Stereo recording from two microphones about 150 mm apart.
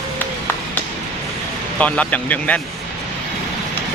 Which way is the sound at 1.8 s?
10° left (ahead or behind).